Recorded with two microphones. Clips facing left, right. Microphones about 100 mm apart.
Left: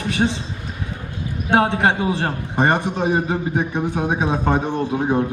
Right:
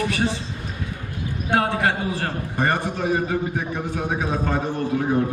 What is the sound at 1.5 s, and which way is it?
A man's voice, 25° left (ahead or behind).